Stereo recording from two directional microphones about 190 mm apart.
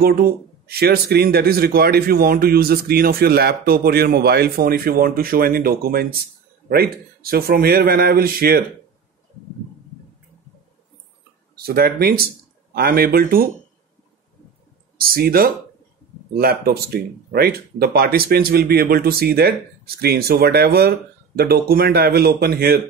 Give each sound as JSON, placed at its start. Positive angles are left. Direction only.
{"t": 0.0, "sound": "speech", "side_deg": -55}
{"t": 11.5, "sound": "speech", "side_deg": -55}
{"t": 15.0, "sound": "speech", "side_deg": -50}